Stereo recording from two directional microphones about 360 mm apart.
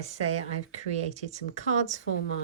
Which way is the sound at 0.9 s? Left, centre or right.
Centre.